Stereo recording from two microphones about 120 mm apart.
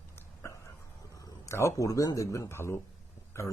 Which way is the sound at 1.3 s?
25° left (ahead or behind).